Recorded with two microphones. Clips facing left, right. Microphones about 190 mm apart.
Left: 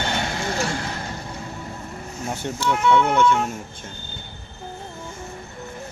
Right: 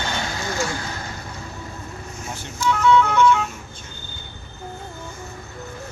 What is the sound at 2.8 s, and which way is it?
Vehicle, 25° left (ahead or behind).